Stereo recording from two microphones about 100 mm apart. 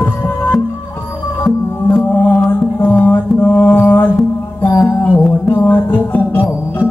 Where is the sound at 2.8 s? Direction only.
15° left (ahead or behind).